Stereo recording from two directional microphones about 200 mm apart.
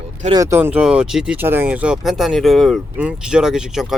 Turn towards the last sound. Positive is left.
turn(degrees=-5)  # may be behind; listen again after turning